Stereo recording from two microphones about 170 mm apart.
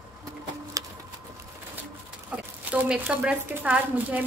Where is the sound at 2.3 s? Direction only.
5° right (ahead or behind).